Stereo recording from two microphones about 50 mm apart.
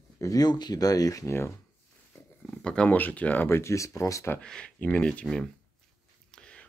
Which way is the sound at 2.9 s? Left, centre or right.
Left.